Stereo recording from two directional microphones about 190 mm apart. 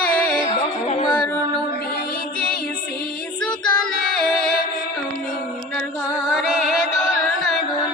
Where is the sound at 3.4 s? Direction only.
5° left (ahead or behind).